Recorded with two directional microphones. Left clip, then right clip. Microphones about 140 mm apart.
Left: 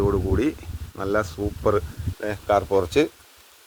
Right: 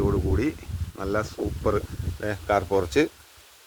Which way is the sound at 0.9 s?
25° left (ahead or behind).